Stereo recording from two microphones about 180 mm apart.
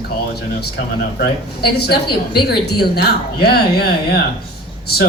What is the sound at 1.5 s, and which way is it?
A woman's voice, 60° left (ahead or behind).